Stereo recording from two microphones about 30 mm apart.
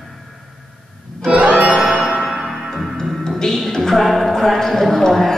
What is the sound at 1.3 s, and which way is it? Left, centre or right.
Music, right.